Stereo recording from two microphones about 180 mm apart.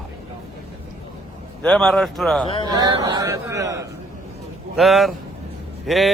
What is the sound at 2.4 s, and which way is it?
Speech, 30° left (ahead or behind).